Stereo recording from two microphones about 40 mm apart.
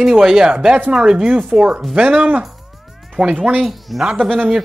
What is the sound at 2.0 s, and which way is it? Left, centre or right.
Speech, right.